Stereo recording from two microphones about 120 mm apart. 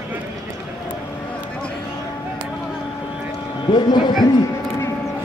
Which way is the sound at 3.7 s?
40° left (ahead or behind).